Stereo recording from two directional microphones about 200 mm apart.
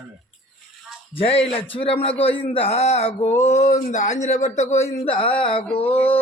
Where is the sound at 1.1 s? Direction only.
30° left (ahead or behind).